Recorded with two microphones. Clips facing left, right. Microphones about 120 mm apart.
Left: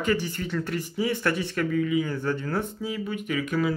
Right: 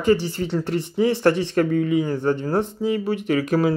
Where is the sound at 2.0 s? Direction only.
25° right (ahead or behind).